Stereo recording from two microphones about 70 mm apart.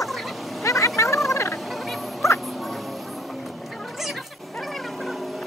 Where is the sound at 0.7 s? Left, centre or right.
Left.